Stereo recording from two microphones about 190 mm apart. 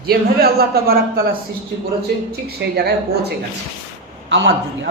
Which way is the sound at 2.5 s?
55° right (ahead or behind).